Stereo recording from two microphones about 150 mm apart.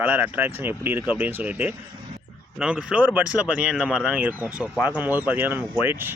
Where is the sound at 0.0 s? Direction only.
10° right (ahead or behind).